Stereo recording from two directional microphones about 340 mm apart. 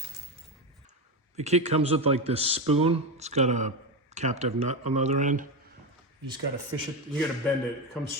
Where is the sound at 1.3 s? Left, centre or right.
Centre.